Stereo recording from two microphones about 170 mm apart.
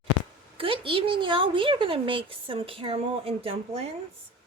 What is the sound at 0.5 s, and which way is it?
A woman's voice, 30° right (ahead or behind).